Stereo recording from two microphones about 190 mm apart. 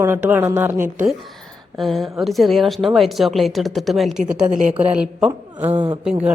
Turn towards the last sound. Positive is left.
turn(degrees=-5)  # may be behind; listen again after turning